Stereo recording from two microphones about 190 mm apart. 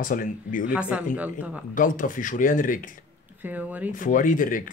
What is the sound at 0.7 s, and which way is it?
Speech, 5° right (ahead or behind).